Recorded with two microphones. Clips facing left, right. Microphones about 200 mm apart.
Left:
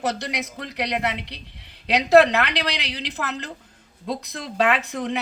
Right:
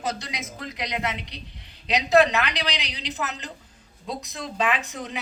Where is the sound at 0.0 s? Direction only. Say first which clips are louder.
Left 5 dB; 65° left (ahead or behind).